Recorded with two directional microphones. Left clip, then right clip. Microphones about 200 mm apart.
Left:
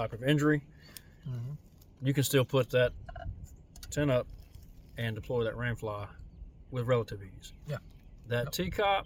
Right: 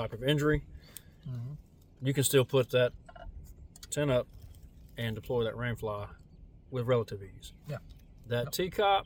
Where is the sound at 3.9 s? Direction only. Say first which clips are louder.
Even; 20° right (ahead or behind).